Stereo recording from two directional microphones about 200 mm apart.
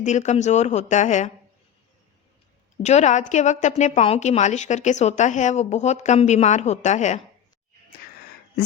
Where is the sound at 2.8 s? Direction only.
35° left (ahead or behind).